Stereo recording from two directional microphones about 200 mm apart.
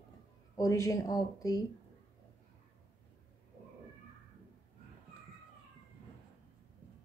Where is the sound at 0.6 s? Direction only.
15° left (ahead or behind).